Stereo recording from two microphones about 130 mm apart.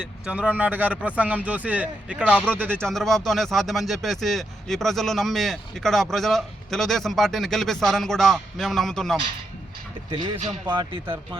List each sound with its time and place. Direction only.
0.3 s speech: 10° right (ahead or behind)
2.7 s speech: 5° left (ahead or behind)
10.1 s speech: 40° right (ahead or behind)